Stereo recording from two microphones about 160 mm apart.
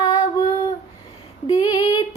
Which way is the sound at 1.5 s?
25° left (ahead or behind).